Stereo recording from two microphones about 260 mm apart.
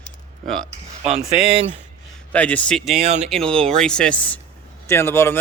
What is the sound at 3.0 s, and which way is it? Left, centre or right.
Speech, right.